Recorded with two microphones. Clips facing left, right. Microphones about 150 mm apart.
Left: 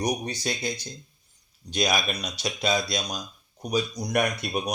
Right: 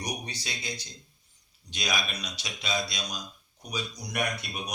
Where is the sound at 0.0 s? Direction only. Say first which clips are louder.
Left 9 dB; 45° left (ahead or behind).